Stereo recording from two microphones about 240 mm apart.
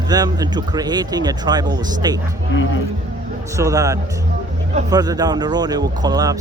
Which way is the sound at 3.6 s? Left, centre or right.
Centre.